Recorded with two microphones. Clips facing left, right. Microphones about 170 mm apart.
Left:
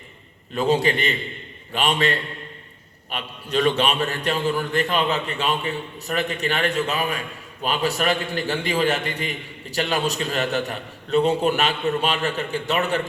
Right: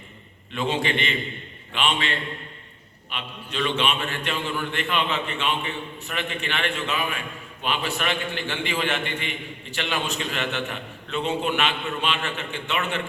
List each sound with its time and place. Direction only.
0.5 s a man's voice: 40° left (ahead or behind)